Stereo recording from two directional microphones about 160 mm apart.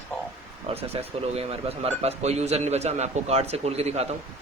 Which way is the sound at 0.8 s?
40° right (ahead or behind).